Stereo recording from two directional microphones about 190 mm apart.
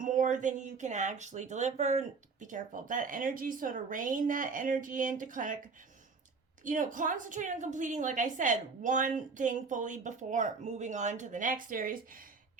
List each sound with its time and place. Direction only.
0.0 s speech: 45° right (ahead or behind)
6.7 s a woman's voice: 45° right (ahead or behind)